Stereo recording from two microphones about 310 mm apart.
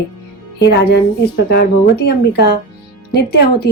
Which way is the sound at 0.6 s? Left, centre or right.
Left.